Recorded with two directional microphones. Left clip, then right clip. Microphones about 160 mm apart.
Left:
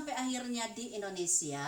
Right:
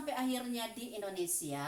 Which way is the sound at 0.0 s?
10° right (ahead or behind).